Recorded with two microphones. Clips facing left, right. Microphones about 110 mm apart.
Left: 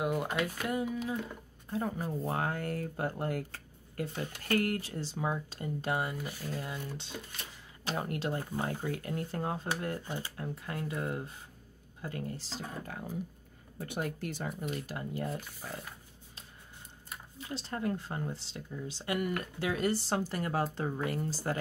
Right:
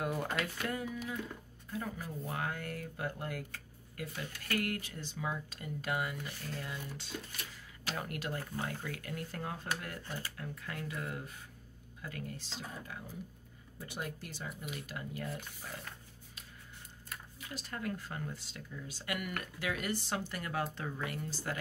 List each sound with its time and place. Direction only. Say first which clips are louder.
0.0 s a sound: left 4 dB; 15° left (ahead or behind)
0.7 s speech: left 5 dB; 20° left (ahead or behind)
6.3 s speech: left 4 dB; 5° left (ahead or behind)
6.6 s speech: left 3 dB; 25° left (ahead or behind); by 14.5 s 55° left (ahead or behind)
14.8 s speech: left 5 dB; 30° left (ahead or behind)
15.3 s speech: left 4 dB; 5° left (ahead or behind)
17.1 s speech: left 5 dB; 30° left (ahead or behind)